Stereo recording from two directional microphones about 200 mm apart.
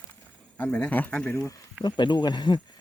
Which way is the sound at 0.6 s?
10° left (ahead or behind).